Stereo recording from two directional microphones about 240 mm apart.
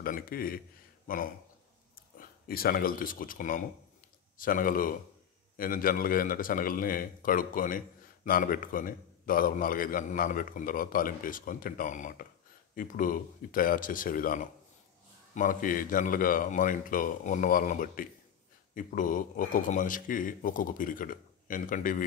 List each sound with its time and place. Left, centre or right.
0.0 s a man's voice: left